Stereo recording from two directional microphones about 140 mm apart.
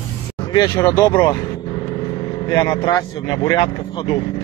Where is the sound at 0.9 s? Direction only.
20° left (ahead or behind).